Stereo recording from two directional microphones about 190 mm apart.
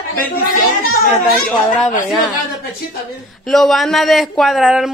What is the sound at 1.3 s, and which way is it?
Speech, centre (ahead or behind).